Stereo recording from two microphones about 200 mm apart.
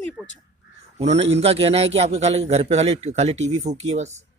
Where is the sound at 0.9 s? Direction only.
30° right (ahead or behind).